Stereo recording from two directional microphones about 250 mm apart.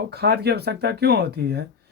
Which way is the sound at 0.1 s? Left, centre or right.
Right.